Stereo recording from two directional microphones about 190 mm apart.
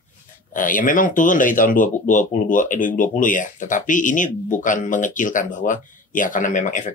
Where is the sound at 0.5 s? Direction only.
45° left (ahead or behind).